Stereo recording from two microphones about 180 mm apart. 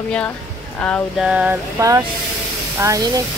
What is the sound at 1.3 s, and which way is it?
Speech, 5° right (ahead or behind).